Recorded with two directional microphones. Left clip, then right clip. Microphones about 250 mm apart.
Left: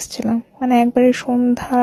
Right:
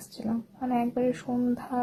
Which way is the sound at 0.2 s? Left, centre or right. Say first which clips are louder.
Left 11 dB; left.